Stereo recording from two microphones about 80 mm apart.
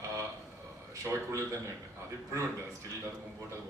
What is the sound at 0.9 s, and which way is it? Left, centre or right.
Speech, right.